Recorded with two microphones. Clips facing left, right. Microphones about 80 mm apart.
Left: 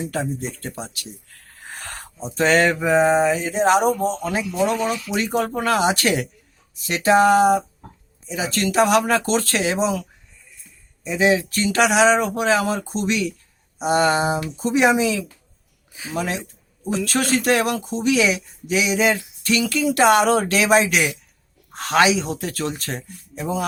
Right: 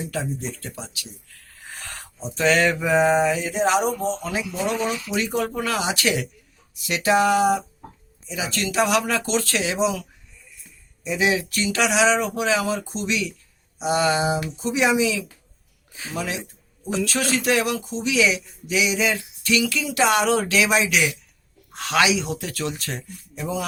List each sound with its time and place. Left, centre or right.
0.0 s speech: left
1.6 s a sound: left
2.3 s speech: left
11.0 s speech: left
15.9 s a sound: centre
16.1 s speech: left